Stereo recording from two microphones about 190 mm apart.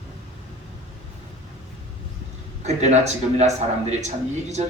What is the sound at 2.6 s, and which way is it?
Speech, 35° right (ahead or behind).